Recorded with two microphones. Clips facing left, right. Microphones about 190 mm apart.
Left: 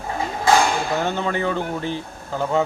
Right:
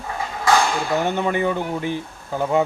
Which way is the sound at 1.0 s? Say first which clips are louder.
Right 2 dB; 15° right (ahead or behind).